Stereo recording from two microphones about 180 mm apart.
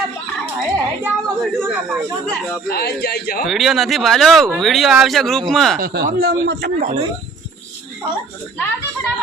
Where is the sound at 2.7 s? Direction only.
65° left (ahead or behind).